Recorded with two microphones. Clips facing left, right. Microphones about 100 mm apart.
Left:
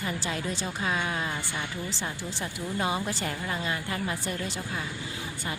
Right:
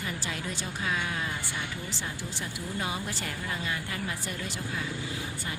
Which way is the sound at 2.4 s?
30° left (ahead or behind).